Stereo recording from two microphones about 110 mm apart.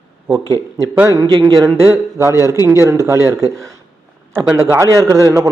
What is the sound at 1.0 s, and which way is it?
Speech, 30° right (ahead or behind).